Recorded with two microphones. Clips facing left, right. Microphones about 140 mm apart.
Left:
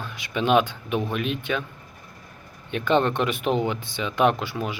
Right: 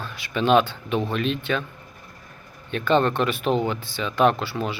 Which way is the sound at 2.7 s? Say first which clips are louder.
Right 1 dB; 15° left (ahead or behind).